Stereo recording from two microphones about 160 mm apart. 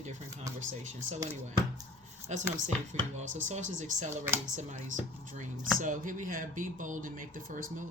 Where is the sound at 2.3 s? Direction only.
45° right (ahead or behind).